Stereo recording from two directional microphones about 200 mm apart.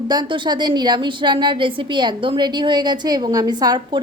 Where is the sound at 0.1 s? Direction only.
20° right (ahead or behind).